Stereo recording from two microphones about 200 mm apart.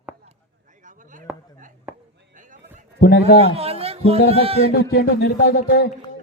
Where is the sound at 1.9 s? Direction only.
10° right (ahead or behind).